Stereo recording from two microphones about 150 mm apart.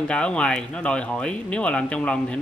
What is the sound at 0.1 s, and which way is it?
Speech, 5° left (ahead or behind).